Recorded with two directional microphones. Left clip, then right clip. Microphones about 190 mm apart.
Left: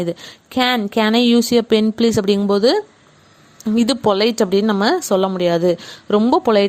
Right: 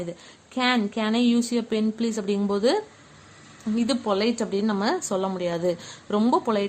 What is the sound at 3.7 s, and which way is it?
Speech, 50° left (ahead or behind).